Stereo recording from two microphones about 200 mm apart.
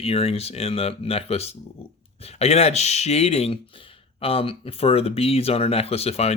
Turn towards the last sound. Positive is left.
turn(degrees=30)  # may be behind; listen again after turning